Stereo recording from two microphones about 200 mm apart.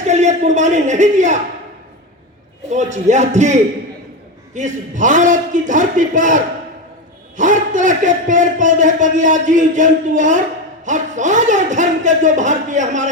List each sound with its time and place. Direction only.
0.0 s a man's voice: 35° right (ahead or behind)
2.6 s a man's voice: 35° right (ahead or behind)